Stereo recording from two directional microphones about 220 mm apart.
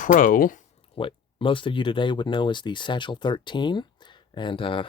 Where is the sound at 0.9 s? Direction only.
25° left (ahead or behind).